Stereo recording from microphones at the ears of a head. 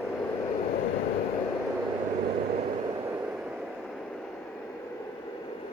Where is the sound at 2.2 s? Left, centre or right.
Right.